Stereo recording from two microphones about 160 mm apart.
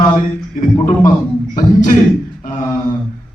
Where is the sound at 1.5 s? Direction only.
55° left (ahead or behind).